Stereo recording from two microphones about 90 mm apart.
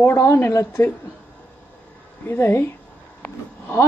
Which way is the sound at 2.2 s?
25° left (ahead or behind).